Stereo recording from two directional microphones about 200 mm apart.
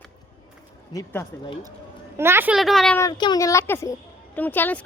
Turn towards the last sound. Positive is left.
turn(degrees=10)  # may be behind; listen again after turning